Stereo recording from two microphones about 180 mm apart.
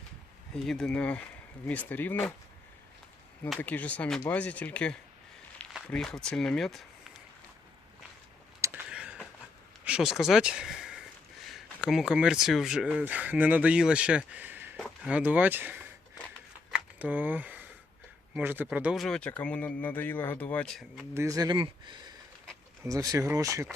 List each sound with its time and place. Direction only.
0.5 s speech: 5° left (ahead or behind)
3.6 s speech: 10° left (ahead or behind)
8.6 s a sound: 10° right (ahead or behind)
9.8 s speech: 5° right (ahead or behind)
16.7 s a sound: 10° right (ahead or behind)
18.3 s speech: 10° right (ahead or behind)
21.2 s speech: 20° right (ahead or behind)